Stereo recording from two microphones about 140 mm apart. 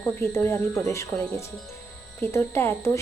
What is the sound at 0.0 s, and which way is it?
A woman's voice, 15° left (ahead or behind).